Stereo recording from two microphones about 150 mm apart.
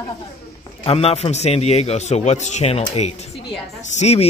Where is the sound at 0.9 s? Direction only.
40° left (ahead or behind).